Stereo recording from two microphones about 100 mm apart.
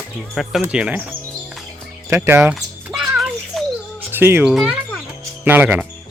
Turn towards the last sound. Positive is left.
turn(degrees=-20)  # may be behind; listen again after turning